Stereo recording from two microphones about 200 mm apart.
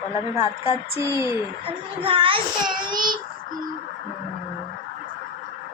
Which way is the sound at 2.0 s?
25° right (ahead or behind).